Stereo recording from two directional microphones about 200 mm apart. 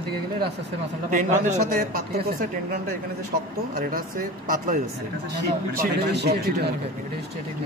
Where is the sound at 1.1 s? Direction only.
45° right (ahead or behind).